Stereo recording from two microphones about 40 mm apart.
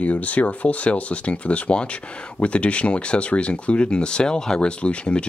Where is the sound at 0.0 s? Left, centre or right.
Left; by 4.6 s centre.